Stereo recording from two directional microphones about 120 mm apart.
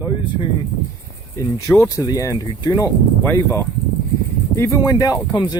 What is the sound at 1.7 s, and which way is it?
Speech, 25° left (ahead or behind).